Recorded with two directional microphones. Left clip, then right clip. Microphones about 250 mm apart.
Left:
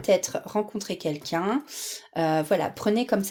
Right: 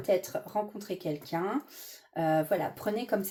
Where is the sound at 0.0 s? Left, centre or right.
Left.